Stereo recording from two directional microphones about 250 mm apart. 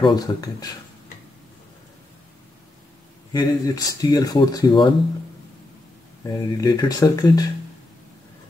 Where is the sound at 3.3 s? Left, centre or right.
Centre.